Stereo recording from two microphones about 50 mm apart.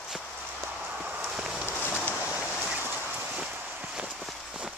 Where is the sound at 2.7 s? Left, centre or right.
Right.